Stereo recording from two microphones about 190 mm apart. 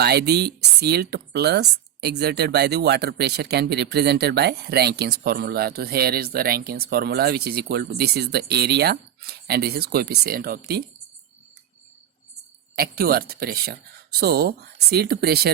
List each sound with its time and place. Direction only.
0.0 s speech: 60° right (ahead or behind)
12.7 s speech: 50° right (ahead or behind)